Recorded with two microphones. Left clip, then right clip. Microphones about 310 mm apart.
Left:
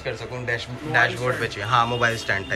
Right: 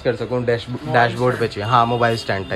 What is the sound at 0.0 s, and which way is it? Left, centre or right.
Speech, right.